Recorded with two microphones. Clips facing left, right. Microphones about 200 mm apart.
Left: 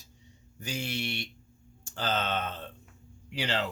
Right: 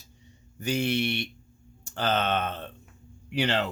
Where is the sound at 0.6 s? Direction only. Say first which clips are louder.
Right 8 dB; 60° right (ahead or behind).